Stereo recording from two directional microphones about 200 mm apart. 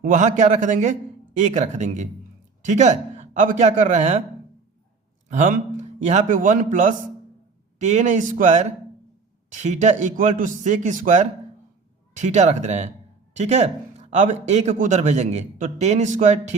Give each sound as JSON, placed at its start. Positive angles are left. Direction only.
{"t": 0.0, "sound": "speech", "side_deg": -40}
{"t": 5.3, "sound": "speech", "side_deg": -40}